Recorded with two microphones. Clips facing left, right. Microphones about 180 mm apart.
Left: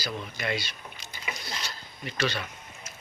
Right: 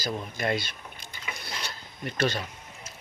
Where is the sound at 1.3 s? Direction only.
60° right (ahead or behind).